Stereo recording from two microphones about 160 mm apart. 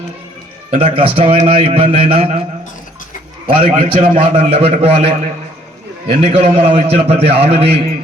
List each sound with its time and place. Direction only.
0.7 s a man's voice: 35° right (ahead or behind)
3.5 s a man's voice: 60° right (ahead or behind)
4.4 s a man's voice: 40° right (ahead or behind)